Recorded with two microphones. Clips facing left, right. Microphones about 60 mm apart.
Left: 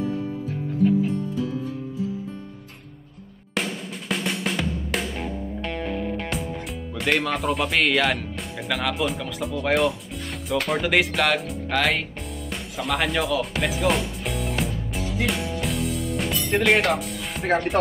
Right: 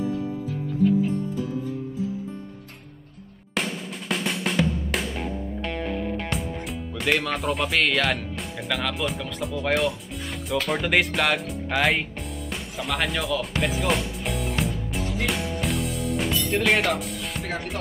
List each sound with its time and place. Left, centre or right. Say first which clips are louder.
3.5 s drum: even; centre
17.4 s speech: left 11 dB; left